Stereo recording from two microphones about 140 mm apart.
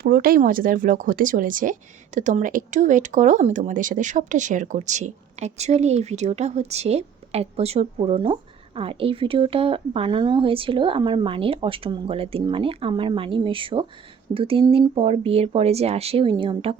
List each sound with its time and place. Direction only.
0.0 s speech: 90° right; by 16.7 s 40° right (ahead or behind)